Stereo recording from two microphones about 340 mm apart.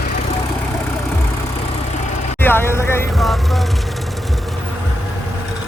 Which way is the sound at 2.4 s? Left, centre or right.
Centre.